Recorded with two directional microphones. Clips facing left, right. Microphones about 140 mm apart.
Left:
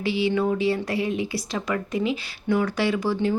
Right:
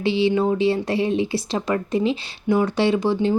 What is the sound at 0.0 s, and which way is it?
A woman's voice, 25° right (ahead or behind).